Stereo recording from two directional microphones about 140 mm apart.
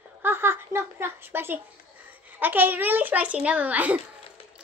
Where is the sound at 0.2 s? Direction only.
15° right (ahead or behind).